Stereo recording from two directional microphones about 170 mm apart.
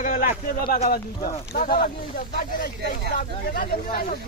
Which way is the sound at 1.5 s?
65° left (ahead or behind).